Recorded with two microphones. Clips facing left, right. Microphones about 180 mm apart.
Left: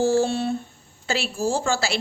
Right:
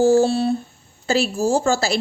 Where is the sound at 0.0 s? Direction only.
40° right (ahead or behind).